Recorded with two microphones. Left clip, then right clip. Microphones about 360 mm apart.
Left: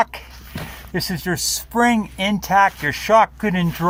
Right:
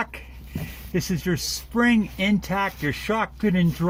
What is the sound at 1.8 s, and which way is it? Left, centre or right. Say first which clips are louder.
Speech: left 4 dB; centre.